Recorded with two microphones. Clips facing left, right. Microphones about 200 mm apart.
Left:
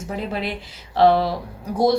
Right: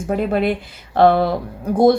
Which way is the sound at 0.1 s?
55° right (ahead or behind).